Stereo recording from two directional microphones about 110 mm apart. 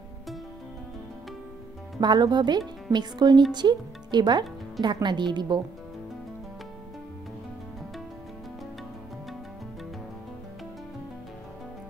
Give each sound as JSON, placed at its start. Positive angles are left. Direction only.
{"t": 2.0, "sound": "a woman's voice", "side_deg": -40}